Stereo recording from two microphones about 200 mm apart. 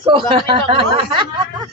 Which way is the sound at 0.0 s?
25° right (ahead or behind).